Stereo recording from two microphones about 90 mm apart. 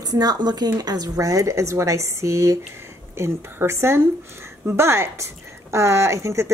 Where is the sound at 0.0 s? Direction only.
45° right (ahead or behind).